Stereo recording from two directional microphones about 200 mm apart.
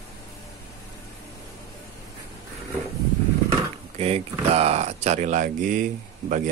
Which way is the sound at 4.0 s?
30° right (ahead or behind).